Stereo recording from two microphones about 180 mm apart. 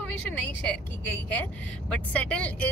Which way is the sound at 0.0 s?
10° left (ahead or behind).